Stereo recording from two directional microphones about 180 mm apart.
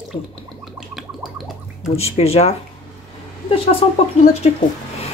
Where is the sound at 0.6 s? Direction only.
Centre (ahead or behind).